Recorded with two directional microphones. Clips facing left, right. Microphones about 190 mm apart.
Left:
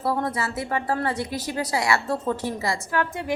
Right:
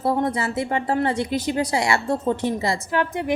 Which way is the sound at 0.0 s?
20° right (ahead or behind).